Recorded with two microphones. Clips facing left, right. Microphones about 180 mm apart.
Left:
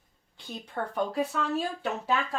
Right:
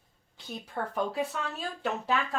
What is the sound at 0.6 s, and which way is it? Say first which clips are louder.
Speech: left 1 dB; centre (ahead or behind).